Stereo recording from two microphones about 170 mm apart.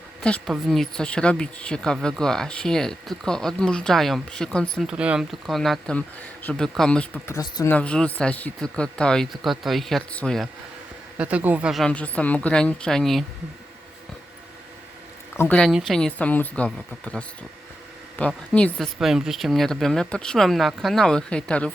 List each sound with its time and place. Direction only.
0.2 s a woman's voice: 5° left (ahead or behind)
7.3 s speech: 20° left (ahead or behind)
7.7 s speech: 5° left (ahead or behind)
11.2 s speech: 10° right (ahead or behind)
15.4 s speech: 10° left (ahead or behind)